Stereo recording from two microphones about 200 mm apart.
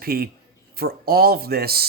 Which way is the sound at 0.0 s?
50° right (ahead or behind).